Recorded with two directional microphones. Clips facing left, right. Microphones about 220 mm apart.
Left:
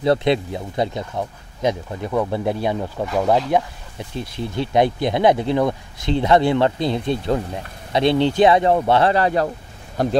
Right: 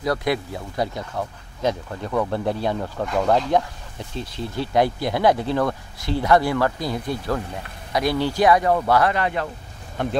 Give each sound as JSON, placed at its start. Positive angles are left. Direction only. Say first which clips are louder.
{"t": 0.0, "sound": "speech", "louder": "left 5 dB", "side_deg": 25}